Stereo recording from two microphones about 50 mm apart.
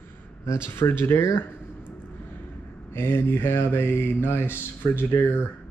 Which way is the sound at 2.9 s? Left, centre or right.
Left.